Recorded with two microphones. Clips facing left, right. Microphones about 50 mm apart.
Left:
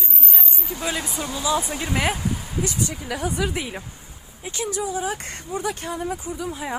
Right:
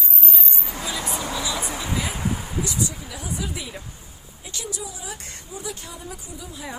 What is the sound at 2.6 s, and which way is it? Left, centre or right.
Speech, left.